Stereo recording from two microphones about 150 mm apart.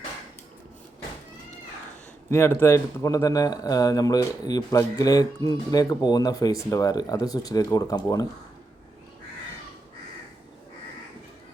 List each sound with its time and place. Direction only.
2.3 s speech: 15° left (ahead or behind)